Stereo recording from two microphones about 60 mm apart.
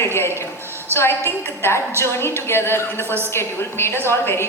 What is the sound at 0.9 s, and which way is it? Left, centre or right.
A woman's voice, left.